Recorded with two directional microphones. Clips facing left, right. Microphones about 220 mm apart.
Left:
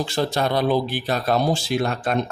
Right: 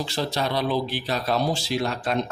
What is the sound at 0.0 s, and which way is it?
Speech, 50° left (ahead or behind).